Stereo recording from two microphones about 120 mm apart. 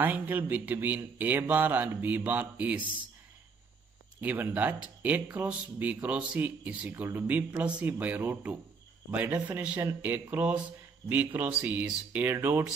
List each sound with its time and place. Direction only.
0.0 s speech: 15° right (ahead or behind)
4.2 s speech: 15° right (ahead or behind)